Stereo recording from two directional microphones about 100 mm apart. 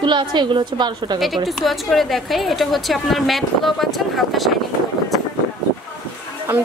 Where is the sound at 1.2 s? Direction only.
Centre (ahead or behind).